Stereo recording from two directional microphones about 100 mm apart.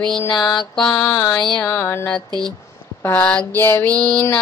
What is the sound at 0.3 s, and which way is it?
Mantra, 45° left (ahead or behind).